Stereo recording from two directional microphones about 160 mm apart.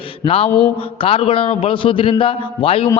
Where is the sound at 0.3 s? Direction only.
35° left (ahead or behind).